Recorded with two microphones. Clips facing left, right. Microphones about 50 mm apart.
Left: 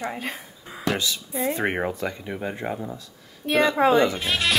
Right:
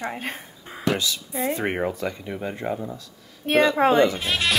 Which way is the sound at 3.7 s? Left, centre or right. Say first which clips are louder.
Even; right.